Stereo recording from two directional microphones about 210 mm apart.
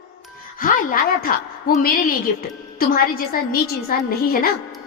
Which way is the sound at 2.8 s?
45° left (ahead or behind).